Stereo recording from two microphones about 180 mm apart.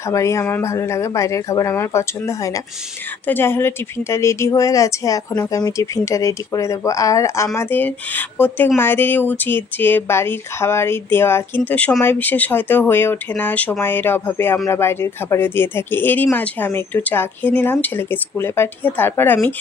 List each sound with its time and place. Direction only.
0.1 s speech: 15° left (ahead or behind)